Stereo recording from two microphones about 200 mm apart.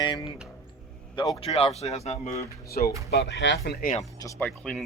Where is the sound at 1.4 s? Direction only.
30° left (ahead or behind).